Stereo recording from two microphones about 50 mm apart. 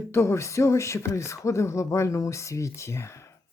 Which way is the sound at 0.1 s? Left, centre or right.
Left.